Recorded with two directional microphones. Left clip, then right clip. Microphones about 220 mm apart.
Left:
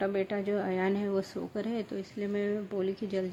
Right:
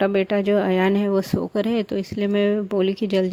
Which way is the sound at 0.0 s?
40° right (ahead or behind).